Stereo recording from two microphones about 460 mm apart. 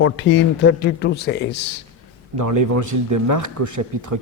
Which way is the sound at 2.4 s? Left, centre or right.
Right.